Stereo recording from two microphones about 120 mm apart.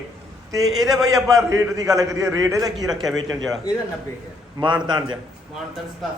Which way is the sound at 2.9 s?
Centre (ahead or behind).